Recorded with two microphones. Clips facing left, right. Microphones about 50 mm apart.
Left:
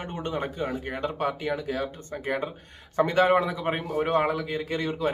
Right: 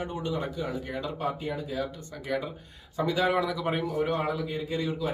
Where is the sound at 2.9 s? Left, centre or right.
Left.